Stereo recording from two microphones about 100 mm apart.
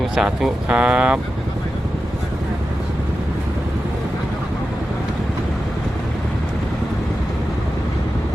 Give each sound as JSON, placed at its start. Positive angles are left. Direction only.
{"t": 0.2, "sound": "speech", "side_deg": -10}